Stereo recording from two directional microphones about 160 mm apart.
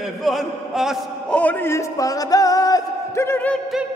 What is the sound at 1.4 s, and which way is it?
A man's voice, 15° left (ahead or behind).